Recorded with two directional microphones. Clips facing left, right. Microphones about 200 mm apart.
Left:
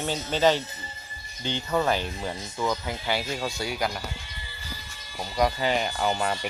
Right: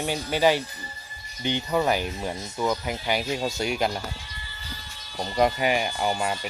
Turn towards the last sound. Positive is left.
turn(degrees=-10)  # may be behind; listen again after turning